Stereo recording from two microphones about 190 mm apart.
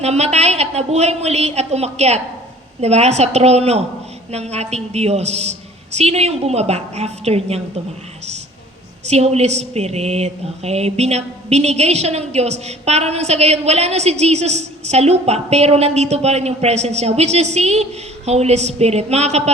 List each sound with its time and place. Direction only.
0.0 s a woman's voice: 35° right (ahead or behind)
9.0 s a woman's voice: 35° right (ahead or behind)